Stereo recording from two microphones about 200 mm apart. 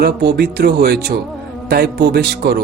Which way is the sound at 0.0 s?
55° right (ahead or behind).